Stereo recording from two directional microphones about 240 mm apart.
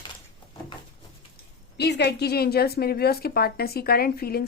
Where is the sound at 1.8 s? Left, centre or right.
Left.